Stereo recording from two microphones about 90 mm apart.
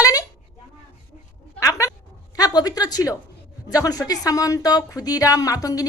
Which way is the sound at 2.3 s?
45° left (ahead or behind).